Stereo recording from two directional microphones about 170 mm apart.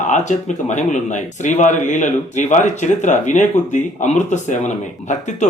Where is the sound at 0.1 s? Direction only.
45° left (ahead or behind).